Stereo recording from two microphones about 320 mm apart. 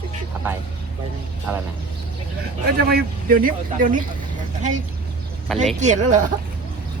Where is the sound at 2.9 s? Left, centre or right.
Right.